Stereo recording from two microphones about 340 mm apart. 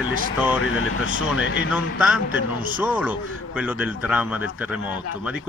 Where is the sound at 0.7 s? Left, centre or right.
Left.